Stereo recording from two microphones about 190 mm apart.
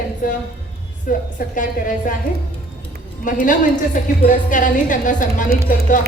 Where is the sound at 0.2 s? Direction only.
45° left (ahead or behind).